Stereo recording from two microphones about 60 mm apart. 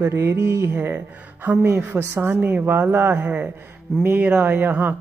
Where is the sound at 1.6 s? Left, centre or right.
Right.